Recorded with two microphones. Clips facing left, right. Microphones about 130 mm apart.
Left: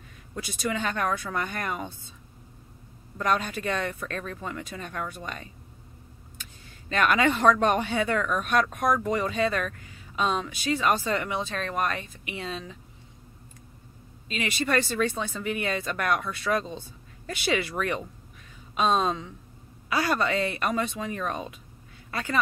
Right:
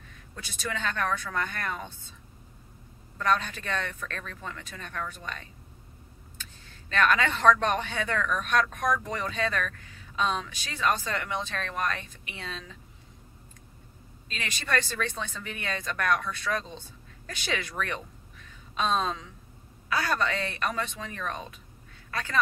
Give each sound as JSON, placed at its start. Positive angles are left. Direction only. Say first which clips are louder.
{"t": 0.3, "sound": "speech", "louder": "left 5 dB", "side_deg": 15}
{"t": 3.2, "sound": "speech", "louder": "left 1 dB", "side_deg": 15}
{"t": 6.9, "sound": "speech", "louder": "left 2 dB", "side_deg": 15}
{"t": 14.3, "sound": "a woman's voice", "louder": "left 4 dB", "side_deg": 10}